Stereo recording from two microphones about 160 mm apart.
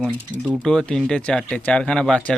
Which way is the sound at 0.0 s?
Centre (ahead or behind).